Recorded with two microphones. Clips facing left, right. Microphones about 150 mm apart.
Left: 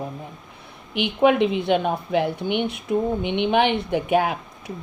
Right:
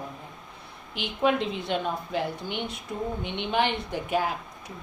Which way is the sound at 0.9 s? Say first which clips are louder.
Left 7 dB; 65° left (ahead or behind).